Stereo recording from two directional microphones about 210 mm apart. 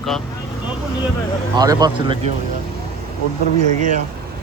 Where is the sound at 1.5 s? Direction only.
20° right (ahead or behind).